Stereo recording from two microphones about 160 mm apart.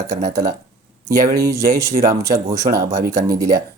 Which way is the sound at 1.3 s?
20° right (ahead or behind).